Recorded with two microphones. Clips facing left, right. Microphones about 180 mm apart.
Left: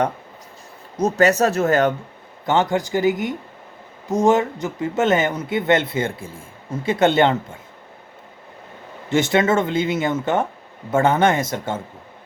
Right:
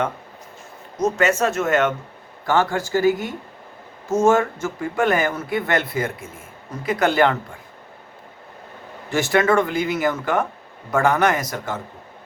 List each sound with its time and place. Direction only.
0.9 s speech: 35° left (ahead or behind)
2.5 s speech: 20° left (ahead or behind)
9.0 s speech: 20° left (ahead or behind)